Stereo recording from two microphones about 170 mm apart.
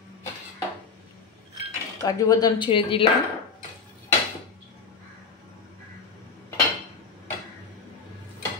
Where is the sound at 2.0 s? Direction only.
20° left (ahead or behind).